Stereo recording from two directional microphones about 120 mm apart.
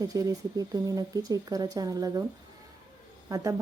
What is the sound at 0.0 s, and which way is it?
Speech, 30° right (ahead or behind).